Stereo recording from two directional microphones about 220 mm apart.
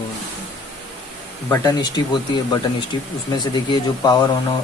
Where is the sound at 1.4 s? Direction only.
15° left (ahead or behind).